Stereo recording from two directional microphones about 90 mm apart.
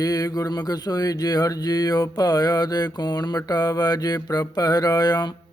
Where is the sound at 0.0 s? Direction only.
45° left (ahead or behind).